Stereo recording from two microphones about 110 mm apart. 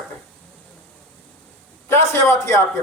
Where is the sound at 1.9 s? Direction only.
25° left (ahead or behind).